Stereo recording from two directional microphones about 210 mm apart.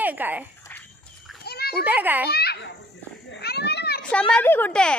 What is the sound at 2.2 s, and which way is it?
Baby laughter, 50° left (ahead or behind).